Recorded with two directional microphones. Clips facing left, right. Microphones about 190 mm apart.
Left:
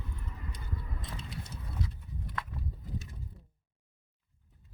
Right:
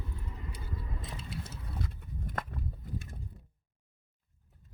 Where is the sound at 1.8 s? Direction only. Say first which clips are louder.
Right 1 dB; 50° right (ahead or behind).